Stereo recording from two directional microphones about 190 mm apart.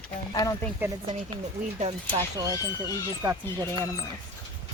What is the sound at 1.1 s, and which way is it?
Speech, 30° right (ahead or behind).